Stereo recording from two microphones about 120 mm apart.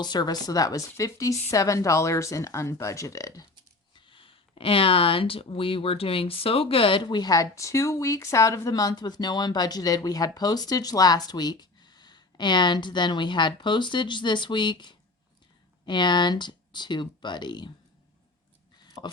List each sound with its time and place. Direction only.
0.0 s a woman's voice: 35° left (ahead or behind)
3.9 s speech: 45° left (ahead or behind)
19.0 s speech: 40° left (ahead or behind)